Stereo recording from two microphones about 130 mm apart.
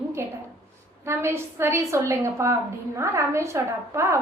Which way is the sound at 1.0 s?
20° right (ahead or behind).